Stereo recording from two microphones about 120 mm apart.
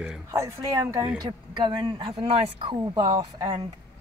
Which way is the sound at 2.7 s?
40° right (ahead or behind).